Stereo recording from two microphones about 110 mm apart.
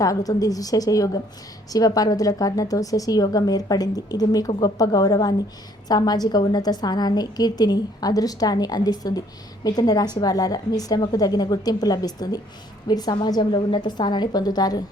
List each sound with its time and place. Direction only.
0.0 s a woman's voice: 35° left (ahead or behind)